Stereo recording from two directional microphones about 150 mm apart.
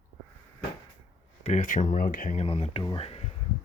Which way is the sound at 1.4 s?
55° left (ahead or behind).